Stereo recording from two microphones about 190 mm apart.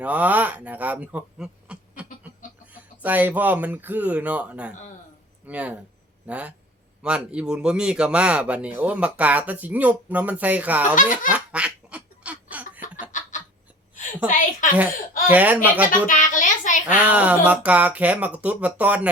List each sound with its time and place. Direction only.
0.0 s speech: 5° right (ahead or behind)
11.3 s duck: 5° right (ahead or behind)
13.1 s a sound: 40° left (ahead or behind)
14.3 s a woman's voice: 45° left (ahead or behind)
15.3 s speech: 10° right (ahead or behind)
15.9 s a sound: 45° left (ahead or behind)
16.8 s speech: 5° right (ahead or behind)